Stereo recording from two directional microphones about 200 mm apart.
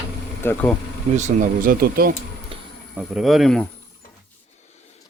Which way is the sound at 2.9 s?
Centre (ahead or behind).